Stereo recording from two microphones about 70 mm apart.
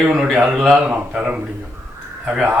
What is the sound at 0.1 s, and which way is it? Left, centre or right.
Speech, centre.